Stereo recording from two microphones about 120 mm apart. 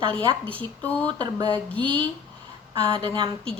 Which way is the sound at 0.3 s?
45° right (ahead or behind).